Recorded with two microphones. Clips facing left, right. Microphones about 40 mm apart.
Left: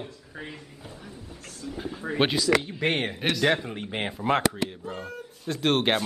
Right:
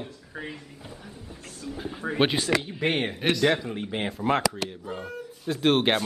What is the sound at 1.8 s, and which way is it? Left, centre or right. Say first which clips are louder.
Speech: right 2 dB; centre.